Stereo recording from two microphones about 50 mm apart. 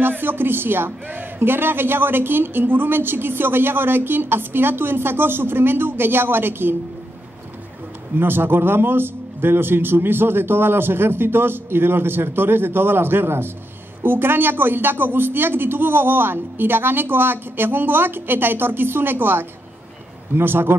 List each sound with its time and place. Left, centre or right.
0.0 s a man's voice: right
8.2 s a man's voice: right